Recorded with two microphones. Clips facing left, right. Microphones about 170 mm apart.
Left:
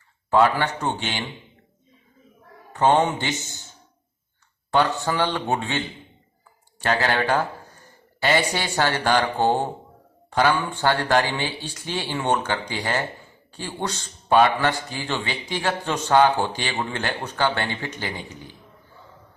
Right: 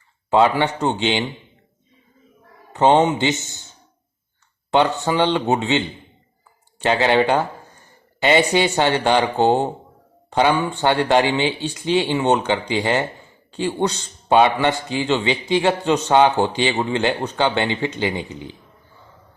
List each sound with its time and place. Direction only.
0.3 s a man's voice: 20° right (ahead or behind)
2.7 s a man's voice: 20° right (ahead or behind)
4.7 s a man's voice: 20° right (ahead or behind)
6.9 s a man's voice: 20° right (ahead or behind)